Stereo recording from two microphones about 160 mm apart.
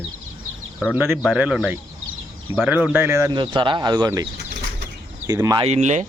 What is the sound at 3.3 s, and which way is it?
Speech, 30° right (ahead or behind).